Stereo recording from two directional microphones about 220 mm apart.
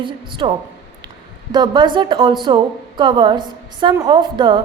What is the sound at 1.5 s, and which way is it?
A woman's voice, 20° right (ahead or behind).